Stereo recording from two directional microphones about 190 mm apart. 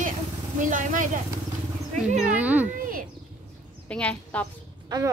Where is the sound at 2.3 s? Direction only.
10° right (ahead or behind).